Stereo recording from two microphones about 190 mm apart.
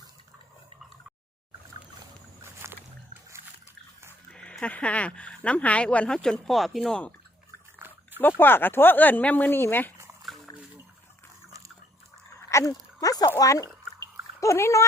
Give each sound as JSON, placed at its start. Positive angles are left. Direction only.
{"t": 2.4, "sound": "rowboat", "side_deg": -15}
{"t": 4.3, "sound": "speech", "side_deg": 5}
{"t": 7.8, "sound": "roaring cats", "side_deg": -10}
{"t": 8.2, "sound": "speech", "side_deg": 10}
{"t": 12.4, "sound": "a sound", "side_deg": 15}
{"t": 13.0, "sound": "speech", "side_deg": 20}